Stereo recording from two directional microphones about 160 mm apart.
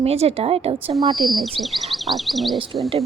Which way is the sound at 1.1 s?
Centre (ahead or behind).